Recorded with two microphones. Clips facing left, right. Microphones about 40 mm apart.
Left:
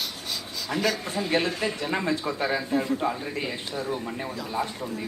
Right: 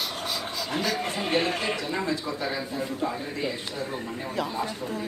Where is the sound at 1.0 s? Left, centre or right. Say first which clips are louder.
Even; right.